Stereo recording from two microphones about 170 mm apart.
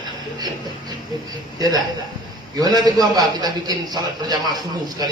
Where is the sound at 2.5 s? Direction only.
25° right (ahead or behind).